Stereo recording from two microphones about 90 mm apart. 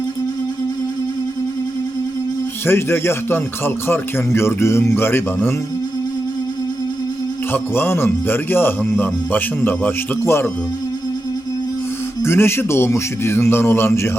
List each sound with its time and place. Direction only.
2.6 s speech: 25° left (ahead or behind)
7.5 s speech: 25° left (ahead or behind)
12.2 s speech: 25° left (ahead or behind)